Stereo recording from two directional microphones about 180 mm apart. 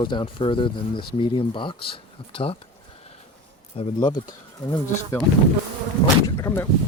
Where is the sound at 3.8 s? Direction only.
25° left (ahead or behind).